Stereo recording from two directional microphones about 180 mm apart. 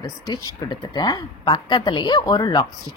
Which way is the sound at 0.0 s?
20° left (ahead or behind).